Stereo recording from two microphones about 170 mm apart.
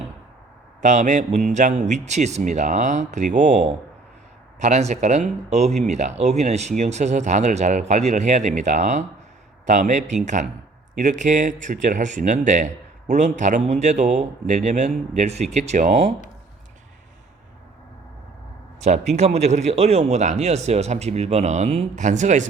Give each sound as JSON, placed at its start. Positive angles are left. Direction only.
{"t": 0.8, "sound": "speech", "side_deg": -45}
{"t": 18.8, "sound": "a man's voice", "side_deg": -40}